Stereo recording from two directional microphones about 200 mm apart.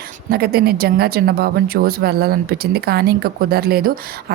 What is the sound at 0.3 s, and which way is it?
Speech, 50° right (ahead or behind).